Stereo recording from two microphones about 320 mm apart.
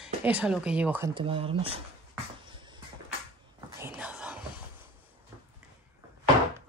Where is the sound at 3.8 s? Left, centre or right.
Centre.